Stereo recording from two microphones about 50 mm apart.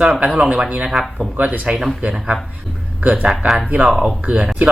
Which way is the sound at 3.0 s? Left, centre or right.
Right.